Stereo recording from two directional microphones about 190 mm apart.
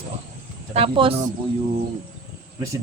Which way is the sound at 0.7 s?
30° right (ahead or behind).